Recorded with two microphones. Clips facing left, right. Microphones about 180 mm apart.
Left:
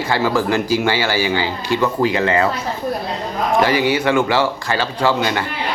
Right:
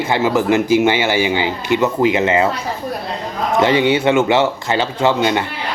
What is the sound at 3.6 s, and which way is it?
Speech, 25° right (ahead or behind).